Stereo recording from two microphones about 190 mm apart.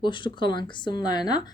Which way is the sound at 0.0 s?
25° left (ahead or behind).